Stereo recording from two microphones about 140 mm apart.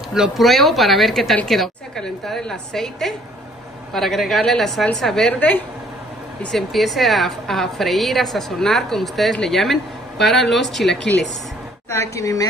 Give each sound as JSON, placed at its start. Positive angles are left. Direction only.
{"t": 0.1, "sound": "a woman's voice", "side_deg": 0}
{"t": 11.9, "sound": "a woman's voice", "side_deg": 20}